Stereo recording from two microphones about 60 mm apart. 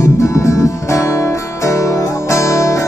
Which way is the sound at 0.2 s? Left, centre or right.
Left.